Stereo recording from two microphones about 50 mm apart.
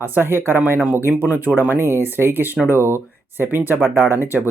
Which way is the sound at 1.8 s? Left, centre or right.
Right.